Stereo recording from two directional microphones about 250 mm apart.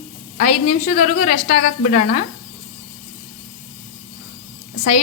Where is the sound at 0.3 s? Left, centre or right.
Left.